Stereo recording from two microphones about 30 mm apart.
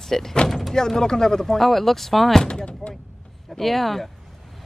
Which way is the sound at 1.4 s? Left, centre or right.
Centre.